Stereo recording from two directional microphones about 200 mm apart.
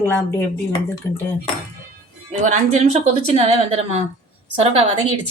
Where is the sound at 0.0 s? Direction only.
10° left (ahead or behind).